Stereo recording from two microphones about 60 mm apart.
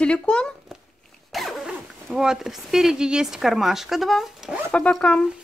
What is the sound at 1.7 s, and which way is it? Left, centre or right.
Speech, centre.